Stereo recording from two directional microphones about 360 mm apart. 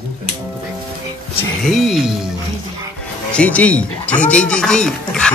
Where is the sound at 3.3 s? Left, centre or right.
Centre.